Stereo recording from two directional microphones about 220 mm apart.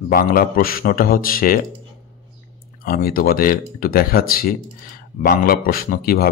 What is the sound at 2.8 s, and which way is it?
Speech, 40° left (ahead or behind).